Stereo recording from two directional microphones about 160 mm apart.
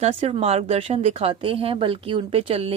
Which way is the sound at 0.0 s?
40° right (ahead or behind).